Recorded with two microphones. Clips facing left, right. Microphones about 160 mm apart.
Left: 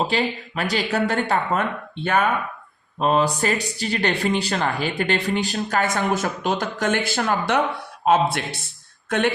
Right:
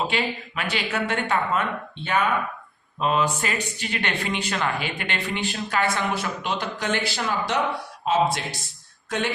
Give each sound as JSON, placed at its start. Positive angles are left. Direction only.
{"t": 0.1, "sound": "speech", "side_deg": 40}
{"t": 3.0, "sound": "speech", "side_deg": 40}